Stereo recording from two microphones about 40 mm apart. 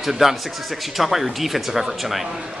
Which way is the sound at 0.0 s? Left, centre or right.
Centre.